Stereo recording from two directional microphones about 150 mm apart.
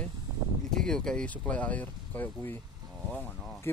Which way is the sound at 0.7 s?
5° left (ahead or behind).